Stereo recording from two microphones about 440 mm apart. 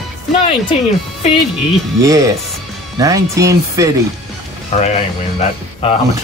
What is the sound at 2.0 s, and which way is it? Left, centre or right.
Speech, centre.